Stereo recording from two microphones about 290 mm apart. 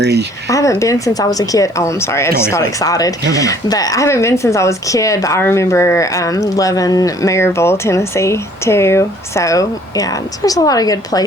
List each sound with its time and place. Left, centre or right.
0.0 s speech: right
0.5 s speech: centre